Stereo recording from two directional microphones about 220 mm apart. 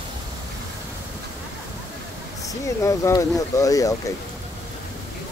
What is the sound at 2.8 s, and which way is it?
Speech, 15° left (ahead or behind).